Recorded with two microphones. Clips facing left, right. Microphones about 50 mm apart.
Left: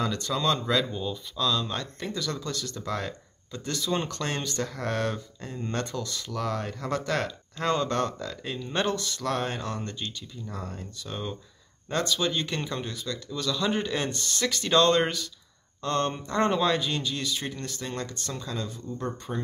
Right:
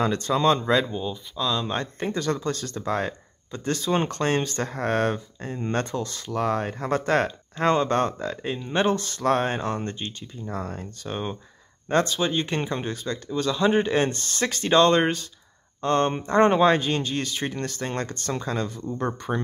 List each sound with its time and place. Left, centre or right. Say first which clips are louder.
0.0 s speech: right 6 dB; right
0.9 s speech: right 2 dB; centre
8.9 s speech: right 6 dB; right